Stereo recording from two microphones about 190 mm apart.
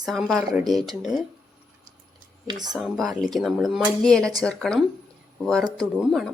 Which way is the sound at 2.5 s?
20° right (ahead or behind).